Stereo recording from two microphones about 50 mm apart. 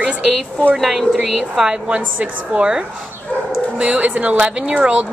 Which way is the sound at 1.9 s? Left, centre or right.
Right.